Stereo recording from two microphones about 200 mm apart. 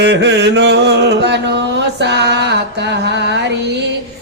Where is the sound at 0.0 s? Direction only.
60° right (ahead or behind).